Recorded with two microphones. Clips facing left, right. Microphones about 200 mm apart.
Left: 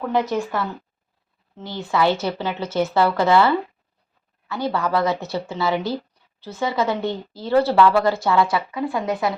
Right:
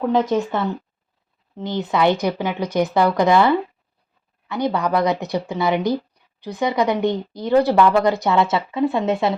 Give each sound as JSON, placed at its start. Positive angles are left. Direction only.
{"t": 0.1, "sound": "speech", "side_deg": -20}